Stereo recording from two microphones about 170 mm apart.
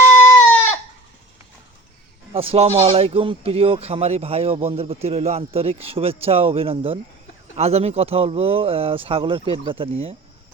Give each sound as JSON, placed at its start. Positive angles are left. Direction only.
{"t": 0.1, "sound": "goat", "side_deg": 15}
{"t": 2.3, "sound": "speech", "side_deg": -35}